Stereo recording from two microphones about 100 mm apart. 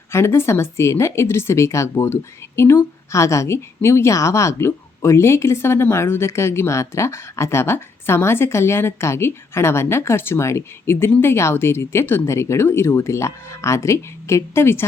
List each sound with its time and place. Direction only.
0.1 s a woman's voice: 25° left (ahead or behind)